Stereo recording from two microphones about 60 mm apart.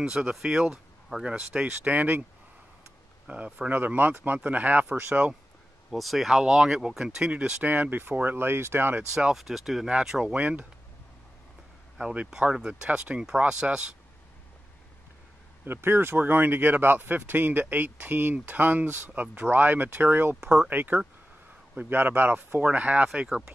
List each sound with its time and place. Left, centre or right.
0.0 s speech: centre
1.3 s speech: right
3.3 s speech: right
3.7 s speech: right
5.9 s speech: centre
7.2 s speech: right
9.1 s speech: centre
10.3 s speech: right
12.0 s speech: centre
15.6 s speech: right
20.7 s speech: right; by 23.4 s centre